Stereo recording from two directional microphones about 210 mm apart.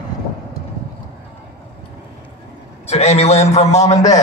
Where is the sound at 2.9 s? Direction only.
30° left (ahead or behind).